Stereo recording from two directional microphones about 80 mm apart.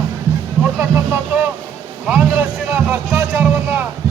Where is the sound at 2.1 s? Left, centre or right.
Right.